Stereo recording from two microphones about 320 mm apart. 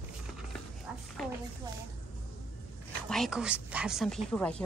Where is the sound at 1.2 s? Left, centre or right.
Centre.